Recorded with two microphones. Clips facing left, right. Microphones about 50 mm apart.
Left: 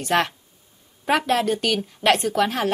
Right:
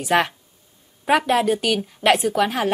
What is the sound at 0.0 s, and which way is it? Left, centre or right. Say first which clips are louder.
A woman's voice: right 2 dB; centre.